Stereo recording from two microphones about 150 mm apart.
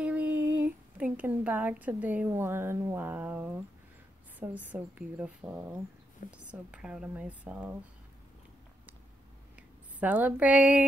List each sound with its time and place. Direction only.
0.0 s speech: 10° right (ahead or behind)
9.9 s speech: 10° right (ahead or behind)